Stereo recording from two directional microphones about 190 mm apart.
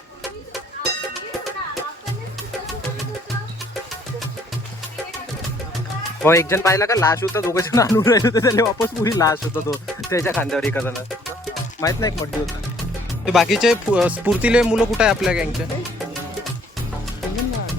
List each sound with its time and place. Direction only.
6.2 s speech: 15° left (ahead or behind)
13.2 s speech: centre (ahead or behind)